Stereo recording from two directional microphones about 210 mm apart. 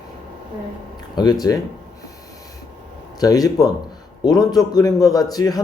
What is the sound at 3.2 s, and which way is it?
A man's voice, 15° left (ahead or behind).